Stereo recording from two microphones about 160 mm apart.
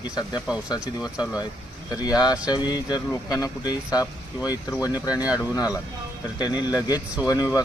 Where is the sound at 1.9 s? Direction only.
25° left (ahead or behind).